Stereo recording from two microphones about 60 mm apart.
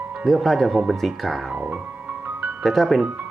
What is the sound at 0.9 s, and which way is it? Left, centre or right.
Speech, centre.